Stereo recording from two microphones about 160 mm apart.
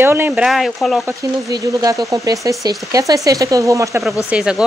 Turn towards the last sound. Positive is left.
turn(degrees=-5)  # may be behind; listen again after turning